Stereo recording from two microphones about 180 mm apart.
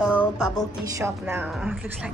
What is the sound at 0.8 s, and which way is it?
Speech, 15° right (ahead or behind).